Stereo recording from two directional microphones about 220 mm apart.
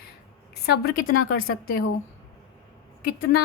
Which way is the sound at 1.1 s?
70° left (ahead or behind).